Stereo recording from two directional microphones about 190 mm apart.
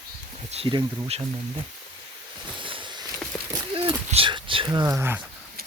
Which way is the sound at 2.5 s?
25° right (ahead or behind).